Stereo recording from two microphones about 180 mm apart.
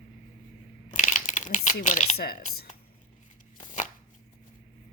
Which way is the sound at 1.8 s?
45° left (ahead or behind).